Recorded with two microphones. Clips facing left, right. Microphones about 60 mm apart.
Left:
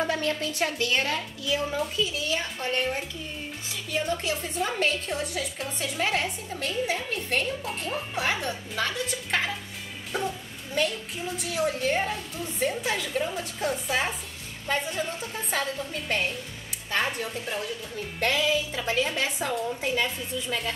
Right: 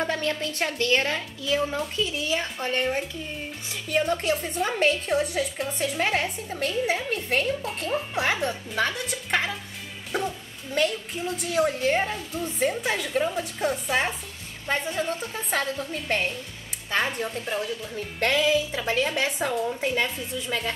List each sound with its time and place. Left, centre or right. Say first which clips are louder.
0.1 s a woman's voice: even; centre
9.3 s music: right 3 dB; centre
10.1 s a woman's voice: right 2 dB; centre